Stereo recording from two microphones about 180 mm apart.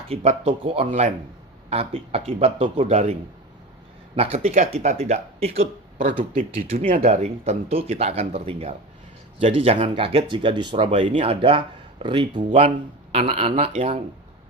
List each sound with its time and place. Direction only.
0.1 s speech: 35° right (ahead or behind)
0.9 s speech: 45° right (ahead or behind)
1.7 s speech: 35° right (ahead or behind)
6.7 s speech: 35° right (ahead or behind)